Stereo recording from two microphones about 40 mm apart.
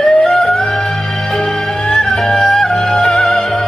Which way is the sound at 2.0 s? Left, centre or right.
Centre.